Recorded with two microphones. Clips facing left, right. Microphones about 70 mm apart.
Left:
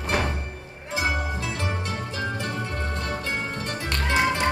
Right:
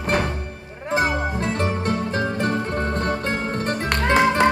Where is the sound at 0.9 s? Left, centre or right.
Right.